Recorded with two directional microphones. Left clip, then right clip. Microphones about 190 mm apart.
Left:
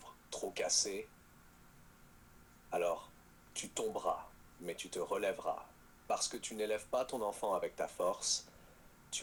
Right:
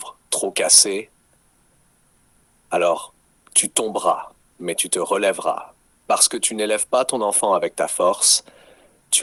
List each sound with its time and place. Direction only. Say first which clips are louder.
0.0 s speech: right 18 dB; 45° right (ahead or behind)
2.6 s speech: right 17 dB; 45° right (ahead or behind)